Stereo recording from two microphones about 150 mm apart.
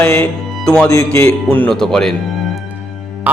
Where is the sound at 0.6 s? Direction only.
5° left (ahead or behind).